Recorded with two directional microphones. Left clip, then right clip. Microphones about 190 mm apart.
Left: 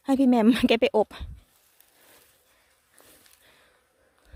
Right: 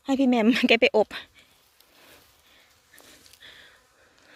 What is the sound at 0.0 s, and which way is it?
Speech, 20° left (ahead or behind).